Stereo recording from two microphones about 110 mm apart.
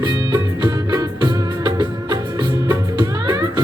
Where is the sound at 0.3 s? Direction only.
30° right (ahead or behind).